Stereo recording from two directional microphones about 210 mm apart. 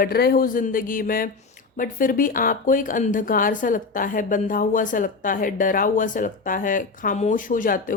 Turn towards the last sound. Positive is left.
turn(degrees=40)  # may be behind; listen again after turning